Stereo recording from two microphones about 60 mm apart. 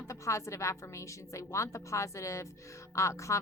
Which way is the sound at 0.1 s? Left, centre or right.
Left.